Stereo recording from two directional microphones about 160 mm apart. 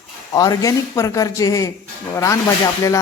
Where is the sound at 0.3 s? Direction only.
20° left (ahead or behind).